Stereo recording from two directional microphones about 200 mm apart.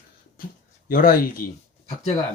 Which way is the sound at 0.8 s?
45° left (ahead or behind).